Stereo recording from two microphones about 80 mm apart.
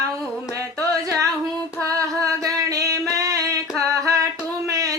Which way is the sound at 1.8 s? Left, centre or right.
Right.